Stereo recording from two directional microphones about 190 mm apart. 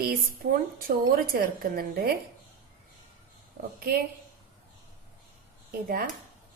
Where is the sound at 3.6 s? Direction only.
50° right (ahead or behind).